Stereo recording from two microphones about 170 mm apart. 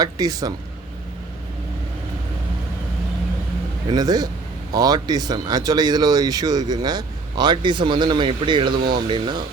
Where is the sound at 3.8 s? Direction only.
25° right (ahead or behind).